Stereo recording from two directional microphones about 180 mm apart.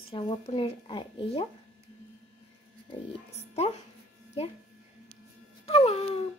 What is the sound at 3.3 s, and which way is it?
Speech, 35° left (ahead or behind).